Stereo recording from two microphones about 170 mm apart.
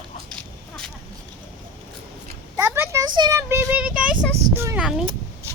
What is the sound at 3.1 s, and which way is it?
Speech, 25° right (ahead or behind).